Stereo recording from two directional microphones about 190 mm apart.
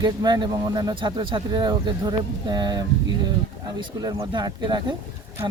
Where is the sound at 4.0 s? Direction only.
20° right (ahead or behind).